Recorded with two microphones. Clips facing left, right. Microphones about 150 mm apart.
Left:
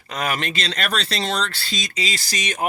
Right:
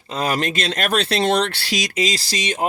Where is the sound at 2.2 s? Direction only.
25° right (ahead or behind).